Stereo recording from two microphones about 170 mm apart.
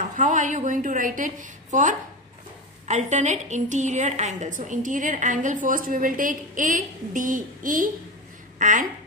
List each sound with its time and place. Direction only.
0.1 s a woman's voice: 50° right (ahead or behind)